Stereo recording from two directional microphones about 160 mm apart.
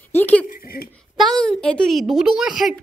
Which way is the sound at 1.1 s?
Centre (ahead or behind).